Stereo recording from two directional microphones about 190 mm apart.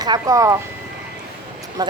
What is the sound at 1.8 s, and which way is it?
Speech, 20° right (ahead or behind).